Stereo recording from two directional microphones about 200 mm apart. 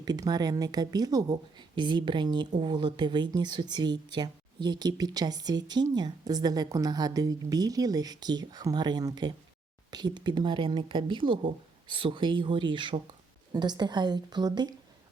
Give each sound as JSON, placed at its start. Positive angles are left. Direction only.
{"t": 0.0, "sound": "speech", "side_deg": -20}